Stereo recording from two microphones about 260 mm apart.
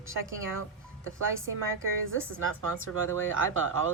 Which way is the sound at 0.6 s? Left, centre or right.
Right.